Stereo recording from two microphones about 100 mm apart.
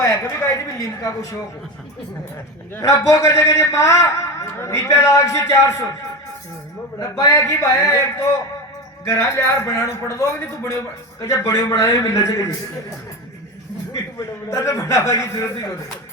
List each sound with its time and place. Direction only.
0.0 s a man's voice: 35° left (ahead or behind)
2.7 s a man's voice: 30° left (ahead or behind)
7.2 s a man's voice: 35° left (ahead or behind)
13.9 s a man's voice: 30° left (ahead or behind)